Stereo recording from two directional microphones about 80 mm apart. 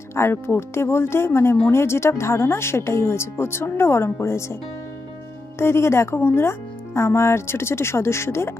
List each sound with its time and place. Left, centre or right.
0.1 s speech: left
5.6 s speech: left